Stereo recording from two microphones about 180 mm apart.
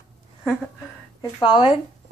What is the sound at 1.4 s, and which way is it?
Speech, 25° left (ahead or behind).